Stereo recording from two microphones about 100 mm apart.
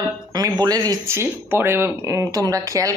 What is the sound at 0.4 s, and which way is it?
Speech, 40° right (ahead or behind).